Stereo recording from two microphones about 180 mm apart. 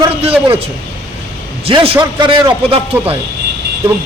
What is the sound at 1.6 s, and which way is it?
A man's voice, 30° right (ahead or behind).